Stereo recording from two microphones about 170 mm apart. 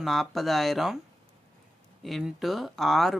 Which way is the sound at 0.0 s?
Centre (ahead or behind).